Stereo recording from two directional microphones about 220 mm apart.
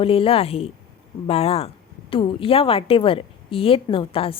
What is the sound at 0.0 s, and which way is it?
Speech, 25° left (ahead or behind).